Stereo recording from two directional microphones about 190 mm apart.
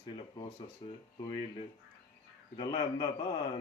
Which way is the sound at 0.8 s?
30° left (ahead or behind).